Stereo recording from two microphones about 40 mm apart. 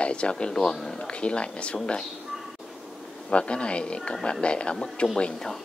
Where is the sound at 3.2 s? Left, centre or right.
Left.